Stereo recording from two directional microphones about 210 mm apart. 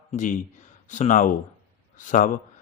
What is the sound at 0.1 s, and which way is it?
Speech, 35° left (ahead or behind).